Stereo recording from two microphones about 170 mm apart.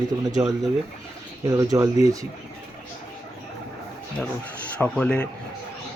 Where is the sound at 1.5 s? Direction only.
20° right (ahead or behind).